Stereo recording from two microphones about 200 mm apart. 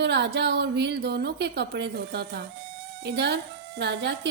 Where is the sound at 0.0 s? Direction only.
60° right (ahead or behind).